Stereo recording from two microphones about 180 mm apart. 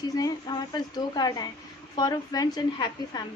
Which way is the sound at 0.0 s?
20° left (ahead or behind).